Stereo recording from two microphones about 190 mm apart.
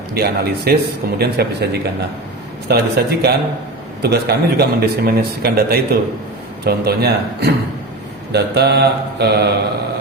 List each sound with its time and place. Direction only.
0.1 s a man's voice: 55° right (ahead or behind)